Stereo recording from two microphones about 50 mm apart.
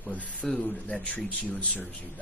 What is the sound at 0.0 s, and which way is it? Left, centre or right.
A man's voice, left.